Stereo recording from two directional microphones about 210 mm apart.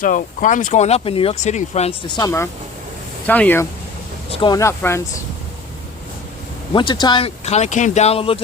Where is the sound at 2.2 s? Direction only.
10° left (ahead or behind).